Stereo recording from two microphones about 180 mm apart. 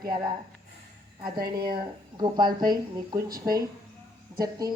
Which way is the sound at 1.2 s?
55° right (ahead or behind).